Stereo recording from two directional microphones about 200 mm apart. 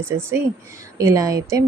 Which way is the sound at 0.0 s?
15° right (ahead or behind).